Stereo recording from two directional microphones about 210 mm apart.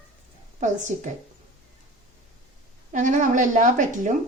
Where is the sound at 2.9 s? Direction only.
35° right (ahead or behind).